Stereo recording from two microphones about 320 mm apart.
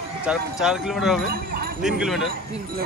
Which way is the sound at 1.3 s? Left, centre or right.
Right.